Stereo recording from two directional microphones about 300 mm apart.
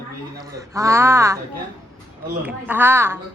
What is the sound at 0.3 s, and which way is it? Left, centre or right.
A woman's voice, centre.